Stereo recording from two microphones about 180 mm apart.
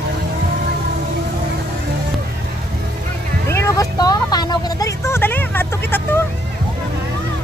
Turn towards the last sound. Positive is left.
turn(degrees=10)  # may be behind; listen again after turning